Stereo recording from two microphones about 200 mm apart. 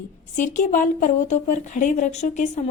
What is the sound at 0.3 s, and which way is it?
A woman's voice, 40° left (ahead or behind).